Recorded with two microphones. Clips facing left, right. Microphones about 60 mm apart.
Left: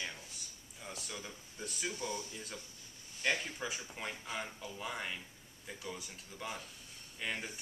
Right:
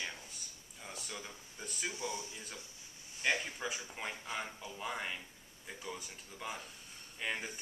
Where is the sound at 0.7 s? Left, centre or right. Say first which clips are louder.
Even; centre.